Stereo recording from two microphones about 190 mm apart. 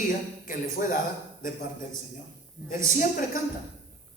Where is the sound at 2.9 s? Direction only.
45° left (ahead or behind).